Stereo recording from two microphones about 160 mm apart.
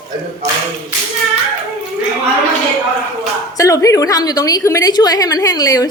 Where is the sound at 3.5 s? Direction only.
20° left (ahead or behind).